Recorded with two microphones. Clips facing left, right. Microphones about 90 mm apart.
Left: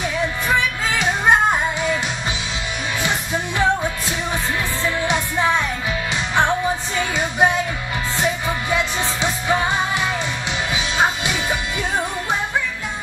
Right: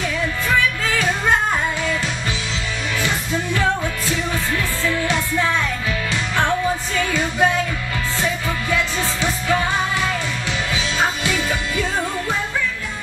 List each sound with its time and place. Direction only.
0.6 s music: 20° left (ahead or behind)
3.0 s music: 20° left (ahead or behind)
4.8 s music: 20° left (ahead or behind)